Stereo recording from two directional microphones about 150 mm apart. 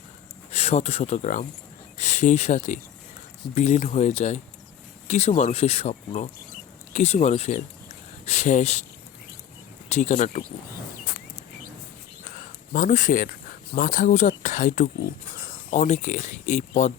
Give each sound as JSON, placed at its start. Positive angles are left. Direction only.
{"t": 0.5, "sound": "speech", "side_deg": 45}
{"t": 9.9, "sound": "speech", "side_deg": 50}
{"t": 12.7, "sound": "speech", "side_deg": 60}